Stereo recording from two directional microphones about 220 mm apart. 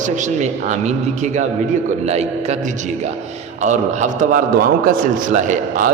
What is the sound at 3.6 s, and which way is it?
A man's voice, 35° right (ahead or behind).